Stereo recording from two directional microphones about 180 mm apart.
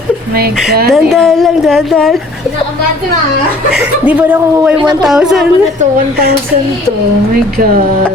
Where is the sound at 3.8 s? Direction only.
10° right (ahead or behind).